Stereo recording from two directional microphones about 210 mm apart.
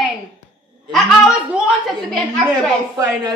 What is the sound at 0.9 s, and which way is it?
Speech, 5° right (ahead or behind).